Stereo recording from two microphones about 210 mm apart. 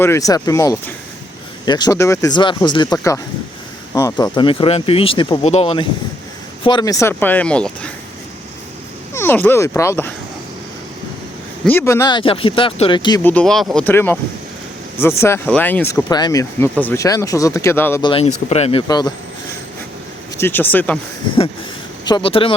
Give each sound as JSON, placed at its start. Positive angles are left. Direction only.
{"t": 0.0, "sound": "speech", "side_deg": 15}
{"t": 9.1, "sound": "speech", "side_deg": 10}
{"t": 11.6, "sound": "speech", "side_deg": 10}
{"t": 18.0, "sound": "speech", "side_deg": 25}
{"t": 20.4, "sound": "speech", "side_deg": 10}
{"t": 22.0, "sound": "speech", "side_deg": 20}